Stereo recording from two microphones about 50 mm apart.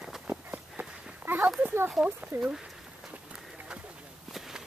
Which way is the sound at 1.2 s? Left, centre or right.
Right.